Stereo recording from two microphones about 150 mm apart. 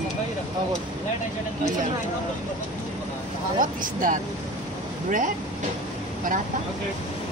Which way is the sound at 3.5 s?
65° right (ahead or behind).